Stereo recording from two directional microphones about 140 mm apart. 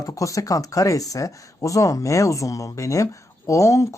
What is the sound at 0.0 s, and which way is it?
Speech, 25° left (ahead or behind).